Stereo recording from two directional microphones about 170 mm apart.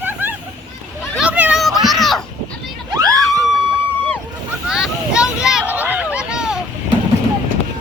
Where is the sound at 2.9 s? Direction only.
20° right (ahead or behind).